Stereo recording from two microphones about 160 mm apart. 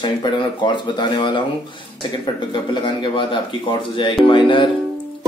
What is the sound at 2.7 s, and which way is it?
A man's voice, 30° left (ahead or behind).